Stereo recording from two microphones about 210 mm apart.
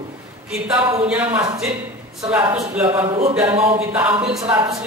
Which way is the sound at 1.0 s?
5° right (ahead or behind).